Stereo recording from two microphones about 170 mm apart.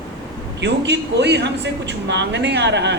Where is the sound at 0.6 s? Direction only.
90° right.